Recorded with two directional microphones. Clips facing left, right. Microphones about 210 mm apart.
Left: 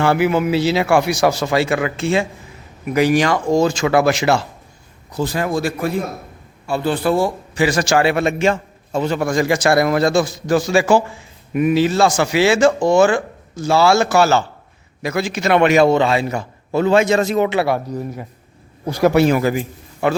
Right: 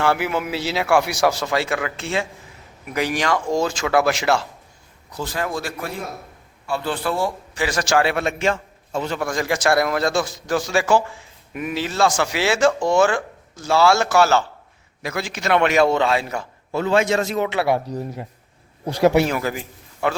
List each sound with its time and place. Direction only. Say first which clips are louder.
0.0 s a man's voice: left 5 dB; centre (ahead or behind)
5.2 s a man's voice: left 6 dB; 10° left (ahead or behind)
15.0 s a man's voice: left 6 dB; 15° left (ahead or behind)
16.7 s a man's voice: left 4 dB; 20° left (ahead or behind)
17.8 s speech: left 2 dB; 35° right (ahead or behind)
19.3 s a man's voice: left 7 dB; 5° left (ahead or behind)